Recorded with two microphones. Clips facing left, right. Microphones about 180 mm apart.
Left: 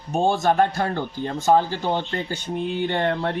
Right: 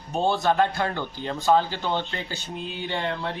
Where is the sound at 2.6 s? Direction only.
55° left (ahead or behind).